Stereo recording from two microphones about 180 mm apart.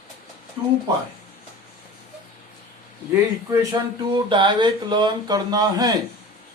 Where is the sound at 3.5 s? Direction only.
25° right (ahead or behind).